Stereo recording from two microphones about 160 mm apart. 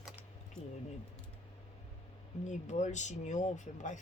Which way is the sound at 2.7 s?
50° left (ahead or behind).